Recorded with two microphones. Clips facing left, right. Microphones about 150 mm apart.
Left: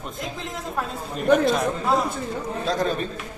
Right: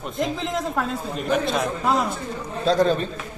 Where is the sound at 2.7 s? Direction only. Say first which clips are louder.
Right 6 dB; 30° right (ahead or behind).